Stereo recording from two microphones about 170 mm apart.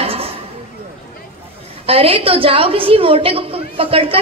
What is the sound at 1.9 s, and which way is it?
A woman's voice, 35° right (ahead or behind).